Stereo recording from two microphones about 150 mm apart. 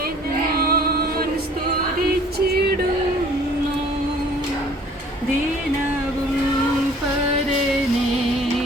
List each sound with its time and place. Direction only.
0.5 s music: 90° right